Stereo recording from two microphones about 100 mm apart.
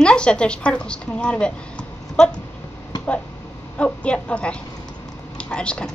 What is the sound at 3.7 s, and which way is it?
A woman's voice, 10° left (ahead or behind).